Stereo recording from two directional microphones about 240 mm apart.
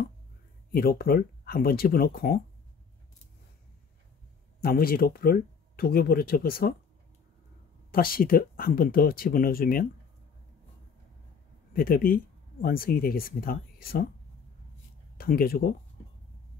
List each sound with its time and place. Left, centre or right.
0.7 s speech: left
4.6 s speech: left
7.9 s speech: left
11.7 s speech: left
15.1 s speech: left